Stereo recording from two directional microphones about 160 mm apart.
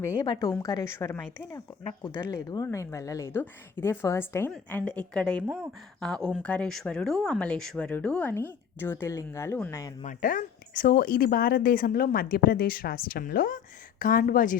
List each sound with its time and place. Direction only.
0.6 s speech: 20° left (ahead or behind)
5.5 s speech: 10° right (ahead or behind)
6.0 s speech: 5° left (ahead or behind)
10.0 s speech: 55° left (ahead or behind)